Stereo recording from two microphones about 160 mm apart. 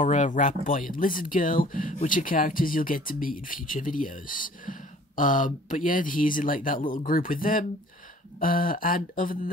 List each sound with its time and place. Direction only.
0.0 s speech: 50° left (ahead or behind)